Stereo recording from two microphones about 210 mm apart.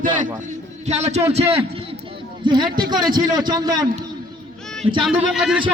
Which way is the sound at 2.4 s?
20° right (ahead or behind).